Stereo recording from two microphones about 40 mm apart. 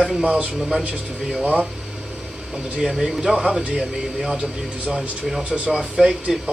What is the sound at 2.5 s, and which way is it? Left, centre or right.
Speech, centre.